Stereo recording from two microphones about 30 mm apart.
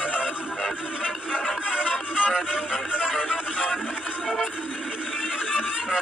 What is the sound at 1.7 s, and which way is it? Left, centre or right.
Music, centre.